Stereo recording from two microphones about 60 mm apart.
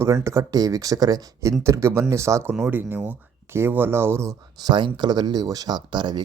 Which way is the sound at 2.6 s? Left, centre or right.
Right.